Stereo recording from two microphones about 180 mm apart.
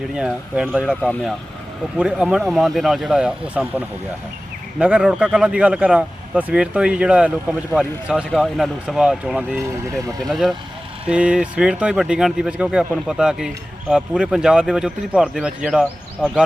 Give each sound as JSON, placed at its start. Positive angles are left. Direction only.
{"t": 0.1, "sound": "speech", "side_deg": -5}
{"t": 2.0, "sound": "speech", "side_deg": -5}
{"t": 10.0, "sound": "speech", "side_deg": -20}
{"t": 10.2, "sound": "speech", "side_deg": 0}